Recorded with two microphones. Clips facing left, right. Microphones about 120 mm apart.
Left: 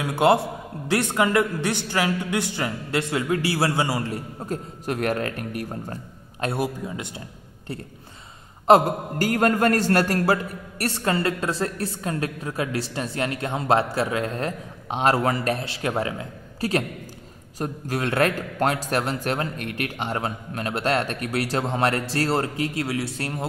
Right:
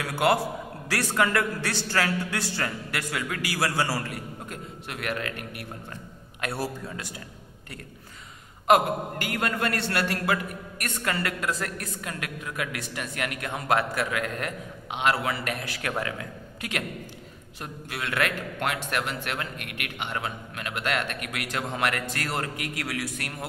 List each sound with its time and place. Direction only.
0.0 s a man's voice: 25° left (ahead or behind)
4.8 s a man's voice: 40° left (ahead or behind)
6.4 s a man's voice: 20° left (ahead or behind)
8.6 s a man's voice: 35° left (ahead or behind)